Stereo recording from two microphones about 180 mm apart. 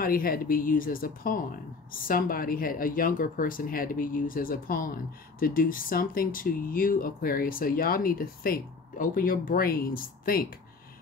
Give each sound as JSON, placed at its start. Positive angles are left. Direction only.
{"t": 0.0, "sound": "speech", "side_deg": 55}